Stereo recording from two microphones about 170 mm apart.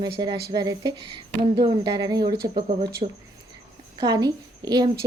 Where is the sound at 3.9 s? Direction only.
20° right (ahead or behind).